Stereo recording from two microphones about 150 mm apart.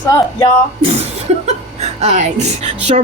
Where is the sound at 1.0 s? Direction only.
45° right (ahead or behind).